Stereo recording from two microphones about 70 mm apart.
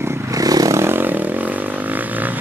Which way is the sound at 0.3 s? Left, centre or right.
Right.